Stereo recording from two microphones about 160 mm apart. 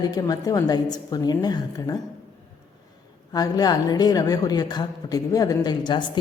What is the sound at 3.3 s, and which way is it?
A woman's voice, 25° left (ahead or behind).